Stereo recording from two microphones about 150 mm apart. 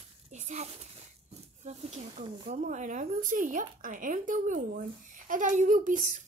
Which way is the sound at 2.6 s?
55° right (ahead or behind).